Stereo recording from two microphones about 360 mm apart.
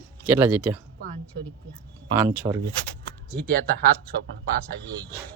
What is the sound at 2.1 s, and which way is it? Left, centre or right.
Speech, centre.